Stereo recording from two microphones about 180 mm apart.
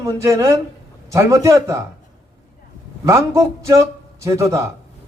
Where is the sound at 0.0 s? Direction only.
15° right (ahead or behind).